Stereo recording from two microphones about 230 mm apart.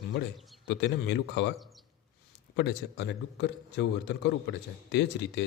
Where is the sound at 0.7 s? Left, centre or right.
Left.